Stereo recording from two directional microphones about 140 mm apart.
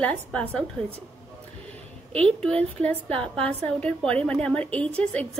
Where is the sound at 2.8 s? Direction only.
5° left (ahead or behind).